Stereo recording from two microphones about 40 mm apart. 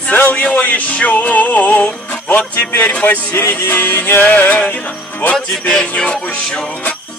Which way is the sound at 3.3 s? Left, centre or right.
Left.